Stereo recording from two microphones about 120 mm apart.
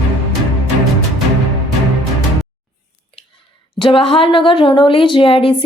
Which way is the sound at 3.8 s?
50° left (ahead or behind).